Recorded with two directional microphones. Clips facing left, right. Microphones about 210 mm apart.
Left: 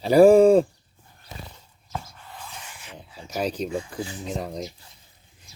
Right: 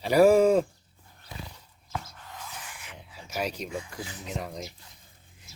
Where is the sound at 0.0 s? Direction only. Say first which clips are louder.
Left 5 dB; 30° left (ahead or behind).